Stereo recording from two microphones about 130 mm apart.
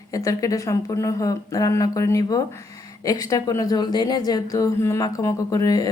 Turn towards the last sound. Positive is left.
turn(degrees=30)  # may be behind; listen again after turning